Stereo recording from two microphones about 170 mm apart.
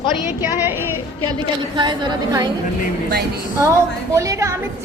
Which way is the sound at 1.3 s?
25° right (ahead or behind).